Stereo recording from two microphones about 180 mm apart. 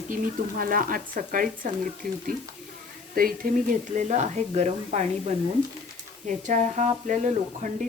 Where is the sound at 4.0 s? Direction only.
40° right (ahead or behind).